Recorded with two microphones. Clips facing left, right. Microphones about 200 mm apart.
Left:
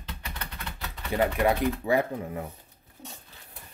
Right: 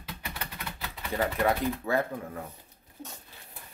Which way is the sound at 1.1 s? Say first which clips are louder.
Left 3 dB; 15° left (ahead or behind).